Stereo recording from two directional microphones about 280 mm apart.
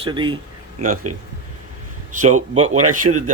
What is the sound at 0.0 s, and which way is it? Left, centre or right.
Speech, centre.